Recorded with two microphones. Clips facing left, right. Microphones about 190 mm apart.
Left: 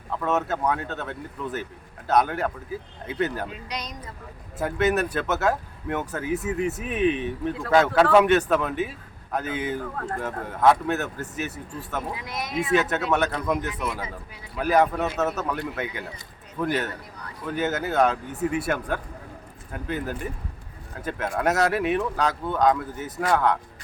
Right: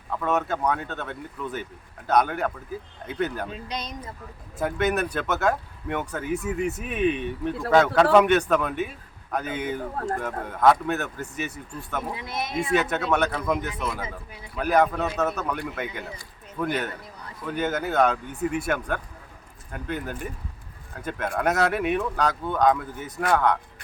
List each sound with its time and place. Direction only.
0.1 s speech: centre (ahead or behind)
3.7 s speech: 25° right (ahead or behind)
4.5 s a man's voice: 5° left (ahead or behind)
12.1 s speech: 25° right (ahead or behind)
12.7 s speech: 5° left (ahead or behind)